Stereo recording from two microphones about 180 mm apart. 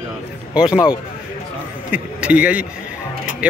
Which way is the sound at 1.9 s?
5° right (ahead or behind).